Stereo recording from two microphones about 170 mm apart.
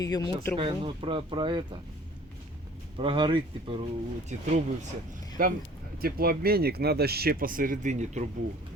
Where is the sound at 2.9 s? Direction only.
30° right (ahead or behind).